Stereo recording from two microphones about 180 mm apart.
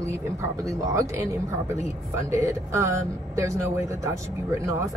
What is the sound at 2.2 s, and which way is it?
Speech, 15° right (ahead or behind).